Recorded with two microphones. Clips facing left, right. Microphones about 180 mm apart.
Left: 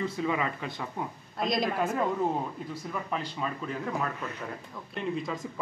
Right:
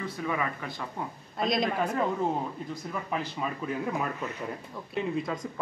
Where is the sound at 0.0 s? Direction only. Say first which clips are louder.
Left 2 dB; 20° left (ahead or behind).